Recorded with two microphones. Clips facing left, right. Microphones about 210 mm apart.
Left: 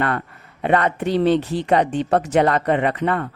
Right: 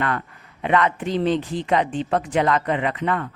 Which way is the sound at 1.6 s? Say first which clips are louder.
Left 3 dB; 40° left (ahead or behind).